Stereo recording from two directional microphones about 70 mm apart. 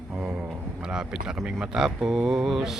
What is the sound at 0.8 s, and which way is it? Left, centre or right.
Speech, centre.